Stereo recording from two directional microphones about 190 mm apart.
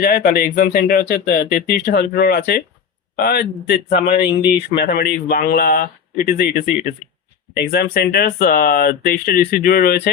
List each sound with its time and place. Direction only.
0.0 s speech: 50° left (ahead or behind)
3.8 s speech: 30° left (ahead or behind)
4.8 s speech: 55° left (ahead or behind)